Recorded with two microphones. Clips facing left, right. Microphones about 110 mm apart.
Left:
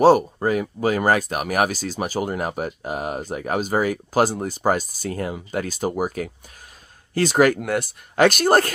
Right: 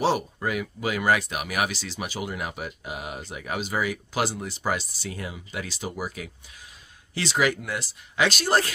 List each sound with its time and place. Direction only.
0.0 s speech: 45° left (ahead or behind)